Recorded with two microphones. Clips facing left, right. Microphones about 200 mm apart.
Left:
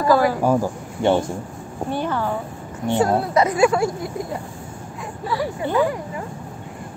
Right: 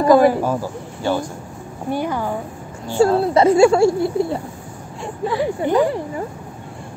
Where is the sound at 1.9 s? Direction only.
10° right (ahead or behind).